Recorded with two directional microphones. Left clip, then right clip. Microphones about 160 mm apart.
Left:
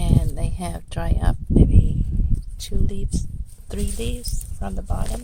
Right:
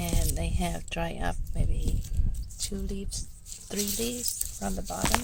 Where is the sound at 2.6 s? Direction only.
15° left (ahead or behind).